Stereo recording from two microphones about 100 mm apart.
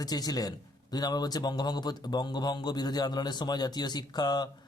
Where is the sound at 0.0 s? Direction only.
40° left (ahead or behind).